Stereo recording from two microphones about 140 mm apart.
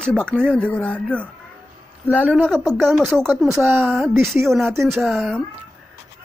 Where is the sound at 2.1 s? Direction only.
10° right (ahead or behind).